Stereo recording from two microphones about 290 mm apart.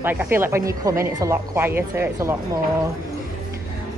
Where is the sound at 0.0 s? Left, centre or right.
Centre.